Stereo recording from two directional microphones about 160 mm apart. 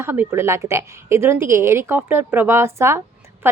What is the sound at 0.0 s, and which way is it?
Speech, 15° right (ahead or behind).